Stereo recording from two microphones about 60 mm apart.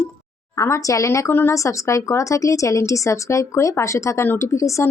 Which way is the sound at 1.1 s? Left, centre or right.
Left.